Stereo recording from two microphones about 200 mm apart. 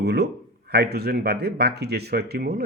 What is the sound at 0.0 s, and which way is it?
Speech, 55° right (ahead or behind).